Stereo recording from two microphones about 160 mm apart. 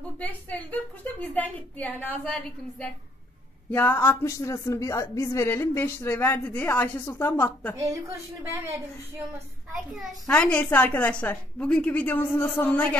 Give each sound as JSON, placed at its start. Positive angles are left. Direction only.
{"t": 0.2, "sound": "speech", "side_deg": 10}
{"t": 3.7, "sound": "speech", "side_deg": 10}
{"t": 7.8, "sound": "speech", "side_deg": -20}
{"t": 9.7, "sound": "speech", "side_deg": 5}